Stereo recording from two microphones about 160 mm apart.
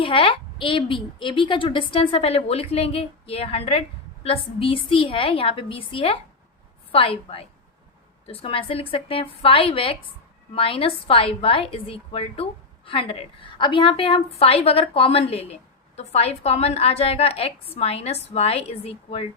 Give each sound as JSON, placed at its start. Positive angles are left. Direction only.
{"t": 0.0, "sound": "a woman's voice", "side_deg": 35}